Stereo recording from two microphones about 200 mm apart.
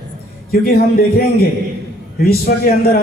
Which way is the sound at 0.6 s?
50° left (ahead or behind).